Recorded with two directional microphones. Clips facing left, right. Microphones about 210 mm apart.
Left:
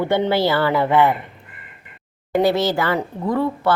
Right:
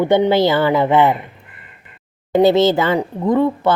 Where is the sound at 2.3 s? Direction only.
20° right (ahead or behind).